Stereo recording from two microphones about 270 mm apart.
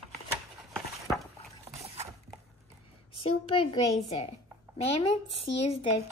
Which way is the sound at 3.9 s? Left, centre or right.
Left.